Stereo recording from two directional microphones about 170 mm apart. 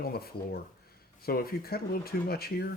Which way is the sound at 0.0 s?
65° left (ahead or behind).